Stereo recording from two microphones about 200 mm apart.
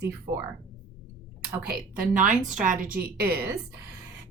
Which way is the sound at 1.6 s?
45° right (ahead or behind).